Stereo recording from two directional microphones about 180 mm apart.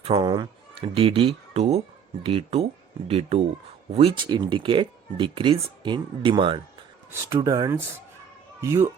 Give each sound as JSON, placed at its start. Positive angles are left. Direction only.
{"t": 0.0, "sound": "a sound", "side_deg": -25}
{"t": 0.9, "sound": "speech", "side_deg": -30}
{"t": 7.1, "sound": "speech", "side_deg": -15}